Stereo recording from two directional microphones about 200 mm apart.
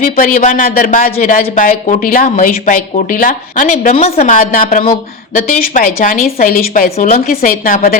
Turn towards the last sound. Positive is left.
turn(degrees=45)  # may be behind; listen again after turning